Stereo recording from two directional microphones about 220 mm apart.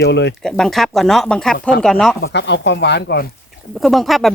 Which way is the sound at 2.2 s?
55° left (ahead or behind).